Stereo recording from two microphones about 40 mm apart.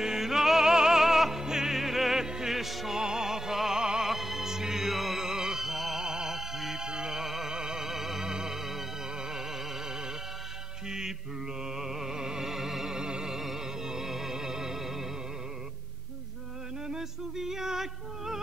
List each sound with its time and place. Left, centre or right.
0.0 s music: centre
3.0 s music: centre
4.1 s music: centre
10.9 s mantra: centre
11.7 s music: centre
16.8 s music: centre